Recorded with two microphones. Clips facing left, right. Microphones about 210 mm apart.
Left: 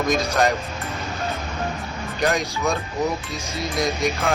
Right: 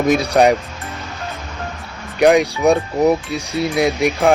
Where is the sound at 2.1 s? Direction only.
65° right (ahead or behind).